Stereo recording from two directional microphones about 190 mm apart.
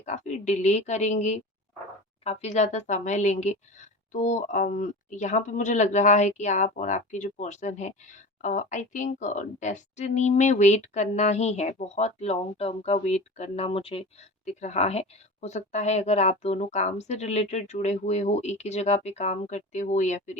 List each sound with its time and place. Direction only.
0.0 s a woman's voice: 40° left (ahead or behind)